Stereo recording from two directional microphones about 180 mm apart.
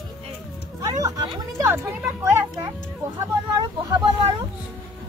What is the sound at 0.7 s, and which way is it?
A child's voice, 20° right (ahead or behind).